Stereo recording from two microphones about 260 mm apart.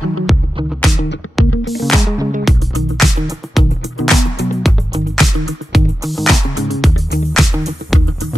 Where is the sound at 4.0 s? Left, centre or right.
Left.